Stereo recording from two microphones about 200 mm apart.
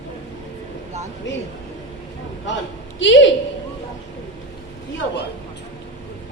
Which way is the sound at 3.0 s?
65° left (ahead or behind).